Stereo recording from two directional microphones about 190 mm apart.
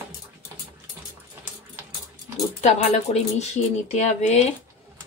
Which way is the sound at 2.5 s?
35° left (ahead or behind).